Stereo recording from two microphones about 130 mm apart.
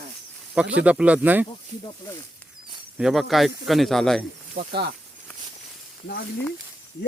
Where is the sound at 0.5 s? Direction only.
10° right (ahead or behind).